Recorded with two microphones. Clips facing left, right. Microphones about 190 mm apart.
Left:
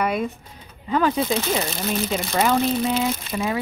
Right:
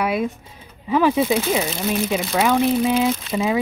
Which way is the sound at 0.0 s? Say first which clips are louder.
Right 2 dB; 5° right (ahead or behind).